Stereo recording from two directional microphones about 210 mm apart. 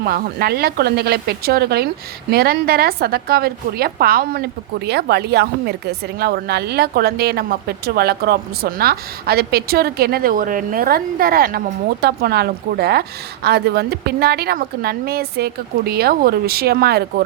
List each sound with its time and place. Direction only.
0.0 s a woman's voice: 50° right (ahead or behind)